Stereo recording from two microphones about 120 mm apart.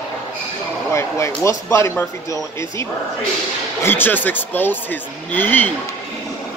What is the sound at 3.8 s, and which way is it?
Speech, 15° left (ahead or behind).